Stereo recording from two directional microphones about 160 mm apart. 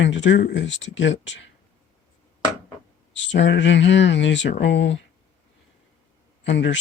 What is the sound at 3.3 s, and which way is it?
Speech, 90° left.